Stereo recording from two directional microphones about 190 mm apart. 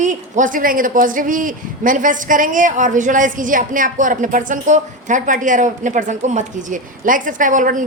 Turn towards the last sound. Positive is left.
turn(degrees=-45)  # may be behind; listen again after turning